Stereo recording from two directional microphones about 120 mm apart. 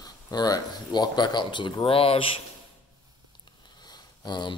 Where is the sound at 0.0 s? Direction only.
35° left (ahead or behind); by 2.2 s 50° left (ahead or behind).